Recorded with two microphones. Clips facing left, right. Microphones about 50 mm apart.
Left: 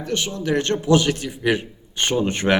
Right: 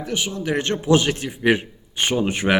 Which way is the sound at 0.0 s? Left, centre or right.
Centre.